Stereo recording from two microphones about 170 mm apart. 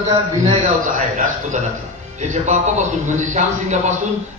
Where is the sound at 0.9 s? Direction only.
45° right (ahead or behind).